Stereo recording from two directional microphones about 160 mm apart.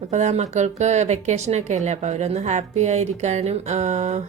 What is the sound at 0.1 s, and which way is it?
Speech, 45° right (ahead or behind).